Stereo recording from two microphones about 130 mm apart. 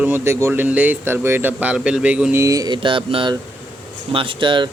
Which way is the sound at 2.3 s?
25° right (ahead or behind).